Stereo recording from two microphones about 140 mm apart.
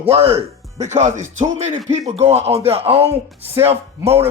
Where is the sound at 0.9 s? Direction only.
55° right (ahead or behind).